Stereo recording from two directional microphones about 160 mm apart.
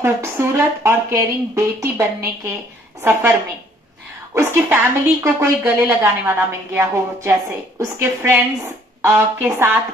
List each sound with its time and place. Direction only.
0.0 s a woman's voice: 15° right (ahead or behind)